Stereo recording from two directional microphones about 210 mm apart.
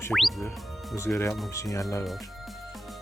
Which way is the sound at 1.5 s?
15° left (ahead or behind).